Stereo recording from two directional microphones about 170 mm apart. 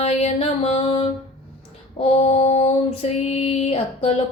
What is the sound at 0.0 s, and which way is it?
Music, 40° left (ahead or behind).